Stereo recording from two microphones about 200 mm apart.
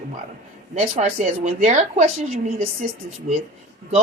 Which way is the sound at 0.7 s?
40° right (ahead or behind).